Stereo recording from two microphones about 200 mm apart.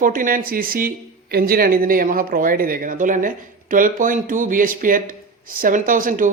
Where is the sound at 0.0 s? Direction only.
45° right (ahead or behind).